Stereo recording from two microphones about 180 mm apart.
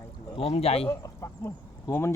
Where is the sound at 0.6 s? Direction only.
35° left (ahead or behind).